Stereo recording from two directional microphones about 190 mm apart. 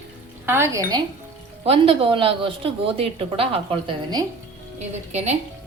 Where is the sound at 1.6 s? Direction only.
30° right (ahead or behind).